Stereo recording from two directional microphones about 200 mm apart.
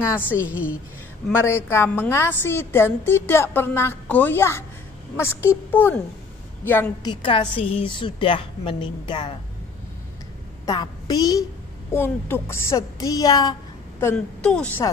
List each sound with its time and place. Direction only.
0.0 s a woman's voice: 10° left (ahead or behind)
0.4 s a woman's voice: 5° right (ahead or behind)
1.3 s a woman's voice: 10° left (ahead or behind)
7.1 s a woman's voice: 25° left (ahead or behind)
10.6 s a woman's voice: 20° left (ahead or behind)
13.9 s a woman's voice: 10° left (ahead or behind)